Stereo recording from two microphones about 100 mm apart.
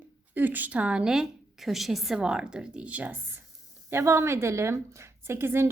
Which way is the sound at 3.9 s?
25° right (ahead or behind).